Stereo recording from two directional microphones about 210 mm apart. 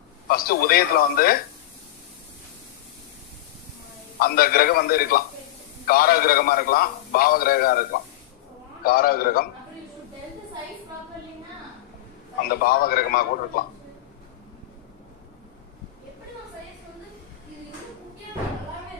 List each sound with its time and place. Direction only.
0.3 s a man's voice: 45° left (ahead or behind)
4.2 s a man's voice: 45° left (ahead or behind)
12.5 s a man's voice: 45° left (ahead or behind)